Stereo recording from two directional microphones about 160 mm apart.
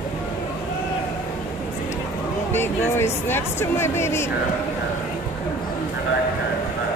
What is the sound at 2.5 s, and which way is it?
Speech, 15° left (ahead or behind).